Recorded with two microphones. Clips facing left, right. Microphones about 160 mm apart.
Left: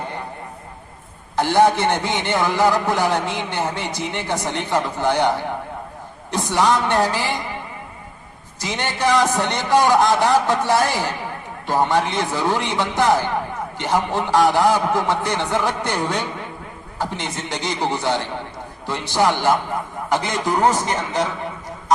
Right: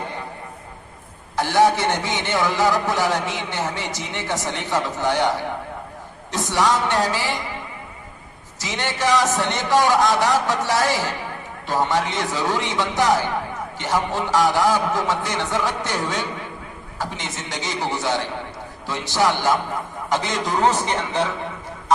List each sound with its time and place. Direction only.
1.4 s a man's voice: 20° left (ahead or behind)
6.3 s a man's voice: 15° left (ahead or behind)
8.6 s a man's voice: 15° left (ahead or behind)
17.3 s a man's voice: 15° left (ahead or behind)